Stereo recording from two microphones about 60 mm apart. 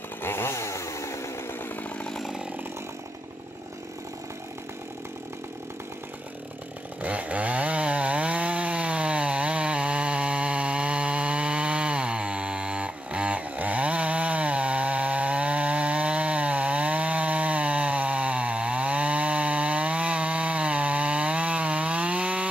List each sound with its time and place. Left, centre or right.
0.2 s chainsaw: left
7.0 s chainsaw: right